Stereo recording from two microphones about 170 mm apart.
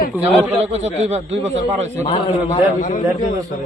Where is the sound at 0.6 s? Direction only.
40° right (ahead or behind).